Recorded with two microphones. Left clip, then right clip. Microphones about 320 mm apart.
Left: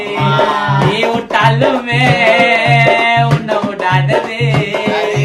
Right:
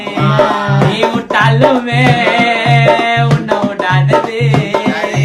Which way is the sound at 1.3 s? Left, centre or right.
Centre.